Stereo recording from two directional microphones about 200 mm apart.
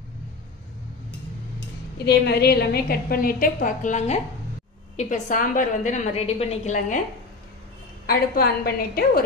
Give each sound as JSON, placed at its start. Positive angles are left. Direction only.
{"t": 2.0, "sound": "a woman's voice", "side_deg": 55}
{"t": 8.1, "sound": "a woman's voice", "side_deg": 50}